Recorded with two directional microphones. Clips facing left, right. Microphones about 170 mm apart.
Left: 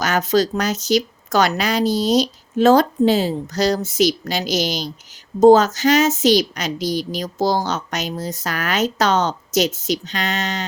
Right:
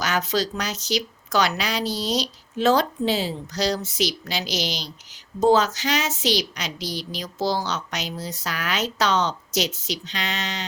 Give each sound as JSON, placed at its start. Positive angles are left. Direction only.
{"t": 0.0, "sound": "a woman's voice", "side_deg": 45}